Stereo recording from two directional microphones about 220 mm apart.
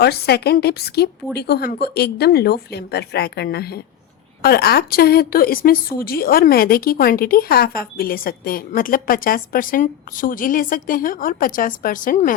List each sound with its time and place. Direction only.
0.0 s a woman's voice: 45° left (ahead or behind)